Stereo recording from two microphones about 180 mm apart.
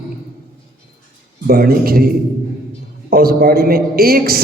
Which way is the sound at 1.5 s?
55° right (ahead or behind).